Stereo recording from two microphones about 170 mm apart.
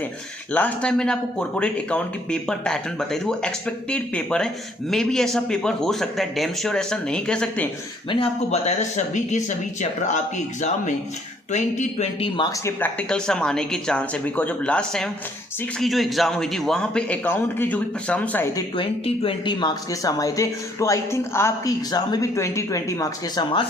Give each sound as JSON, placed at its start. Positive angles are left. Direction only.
{"t": 0.5, "sound": "speech", "side_deg": 10}
{"t": 8.1, "sound": "speech", "side_deg": 35}
{"t": 12.4, "sound": "speech", "side_deg": 20}
{"t": 18.5, "sound": "speech", "side_deg": 30}